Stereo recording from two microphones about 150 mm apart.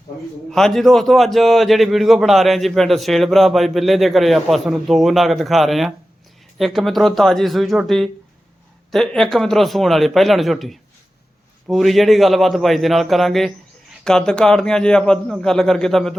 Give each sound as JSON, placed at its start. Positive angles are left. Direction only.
{"t": 0.5, "sound": "a man's voice", "side_deg": 0}